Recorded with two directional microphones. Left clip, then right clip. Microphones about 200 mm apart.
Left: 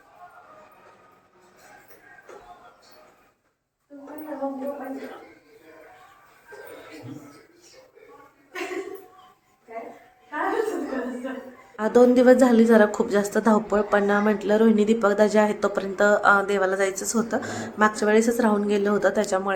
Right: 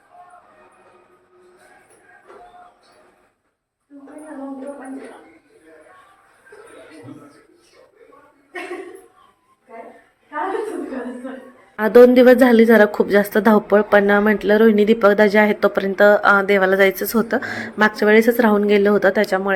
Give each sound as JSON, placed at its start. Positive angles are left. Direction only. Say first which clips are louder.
{"t": 11.8, "sound": "a woman's voice", "louder": "right 8 dB", "side_deg": -20}